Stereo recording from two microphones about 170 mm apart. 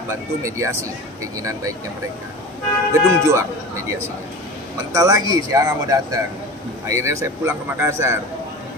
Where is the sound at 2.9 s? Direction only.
15° right (ahead or behind).